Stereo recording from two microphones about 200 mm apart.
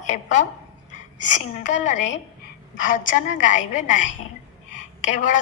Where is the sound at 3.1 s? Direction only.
40° left (ahead or behind).